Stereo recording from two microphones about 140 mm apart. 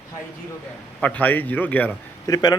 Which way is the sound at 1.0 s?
10° left (ahead or behind).